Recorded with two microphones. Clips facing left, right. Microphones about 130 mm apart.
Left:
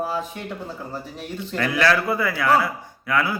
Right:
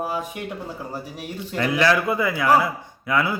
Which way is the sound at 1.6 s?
20° right (ahead or behind).